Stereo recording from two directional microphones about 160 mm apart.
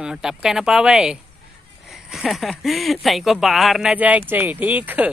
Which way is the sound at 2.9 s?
Centre (ahead or behind).